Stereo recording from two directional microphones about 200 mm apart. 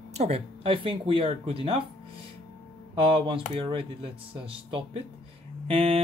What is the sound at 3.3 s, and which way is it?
Speech, 25° right (ahead or behind).